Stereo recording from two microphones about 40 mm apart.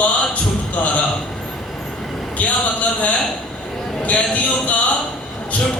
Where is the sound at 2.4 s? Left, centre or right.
Left.